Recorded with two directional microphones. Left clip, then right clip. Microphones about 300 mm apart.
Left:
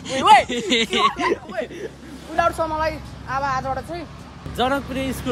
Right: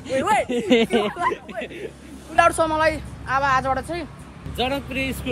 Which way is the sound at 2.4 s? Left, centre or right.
Right.